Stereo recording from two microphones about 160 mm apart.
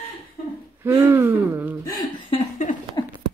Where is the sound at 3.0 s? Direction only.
25° left (ahead or behind).